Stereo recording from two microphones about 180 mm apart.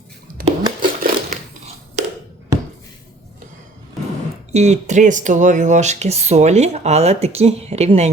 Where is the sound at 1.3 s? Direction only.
40° right (ahead or behind).